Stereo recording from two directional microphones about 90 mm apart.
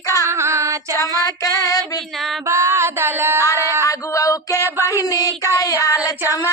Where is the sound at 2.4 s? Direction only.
30° right (ahead or behind).